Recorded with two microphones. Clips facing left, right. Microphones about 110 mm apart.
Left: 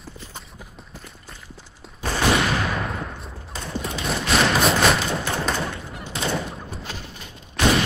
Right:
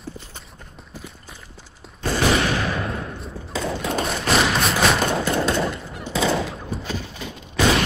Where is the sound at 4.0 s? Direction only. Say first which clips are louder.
Even; centre (ahead or behind).